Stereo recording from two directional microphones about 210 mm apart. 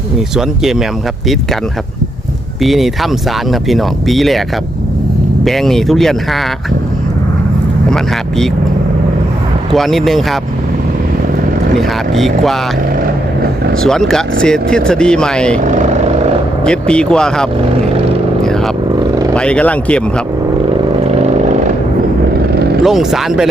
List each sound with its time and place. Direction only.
0.3 s speech: centre (ahead or behind)
2.6 s speech: centre (ahead or behind)
5.5 s speech: centre (ahead or behind)
7.9 s speech: centre (ahead or behind)
9.7 s speech: centre (ahead or behind)
11.8 s speech: centre (ahead or behind)
13.7 s speech: centre (ahead or behind)
15.6 s vehicle: 35° right (ahead or behind)
16.6 s speech: 5° left (ahead or behind)
22.8 s speech: centre (ahead or behind)